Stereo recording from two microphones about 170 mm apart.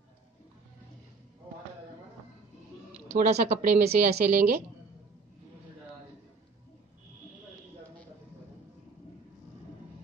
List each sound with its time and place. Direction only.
3.2 s speech: 40° right (ahead or behind)